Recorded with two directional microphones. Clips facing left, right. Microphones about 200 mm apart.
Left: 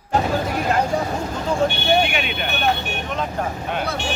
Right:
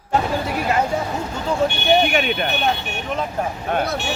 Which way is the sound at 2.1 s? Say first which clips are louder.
Right 5 dB; 45° right (ahead or behind).